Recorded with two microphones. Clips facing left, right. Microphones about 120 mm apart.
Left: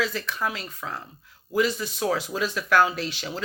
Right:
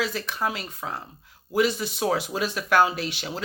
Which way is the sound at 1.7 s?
25° right (ahead or behind).